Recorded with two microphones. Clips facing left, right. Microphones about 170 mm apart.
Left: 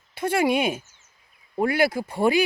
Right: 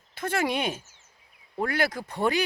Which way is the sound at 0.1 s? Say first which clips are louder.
Left 6 dB; 10° left (ahead or behind).